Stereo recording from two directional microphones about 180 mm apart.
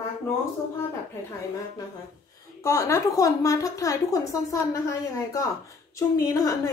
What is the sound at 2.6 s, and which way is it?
A woman's voice, 15° left (ahead or behind).